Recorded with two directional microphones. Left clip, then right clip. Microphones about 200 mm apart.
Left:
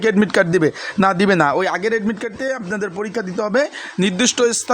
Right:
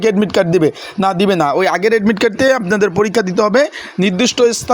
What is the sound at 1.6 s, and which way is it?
Speech, 20° right (ahead or behind).